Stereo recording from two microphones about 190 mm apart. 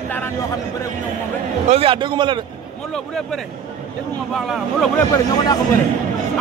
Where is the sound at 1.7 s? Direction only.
30° right (ahead or behind).